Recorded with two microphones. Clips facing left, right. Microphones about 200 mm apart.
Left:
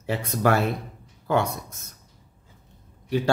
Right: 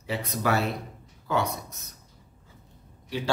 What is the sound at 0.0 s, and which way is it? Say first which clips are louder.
Speech: left 5 dB; 50° left (ahead or behind).